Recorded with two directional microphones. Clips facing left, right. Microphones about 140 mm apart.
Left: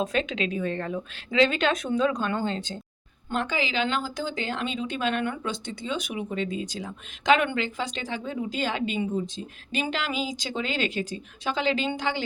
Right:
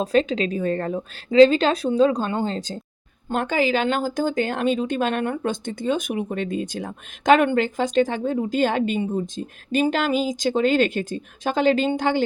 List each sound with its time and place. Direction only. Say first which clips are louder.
0.0 s a woman's voice: right 7 dB; 35° right (ahead or behind)
3.2 s speech: right 7 dB; 50° right (ahead or behind)